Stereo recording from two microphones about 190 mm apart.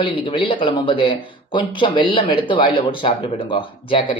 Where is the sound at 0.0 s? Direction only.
25° left (ahead or behind).